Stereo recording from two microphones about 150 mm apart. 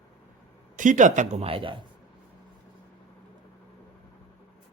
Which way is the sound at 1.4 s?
35° right (ahead or behind).